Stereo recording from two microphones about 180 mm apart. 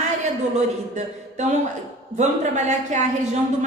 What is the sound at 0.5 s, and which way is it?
A woman's voice, 40° right (ahead or behind).